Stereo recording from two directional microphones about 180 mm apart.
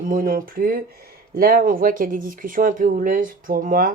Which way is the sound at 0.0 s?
50° right (ahead or behind).